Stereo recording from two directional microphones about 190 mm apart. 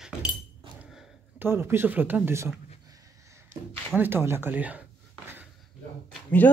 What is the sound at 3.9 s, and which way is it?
Speech, 10° right (ahead or behind).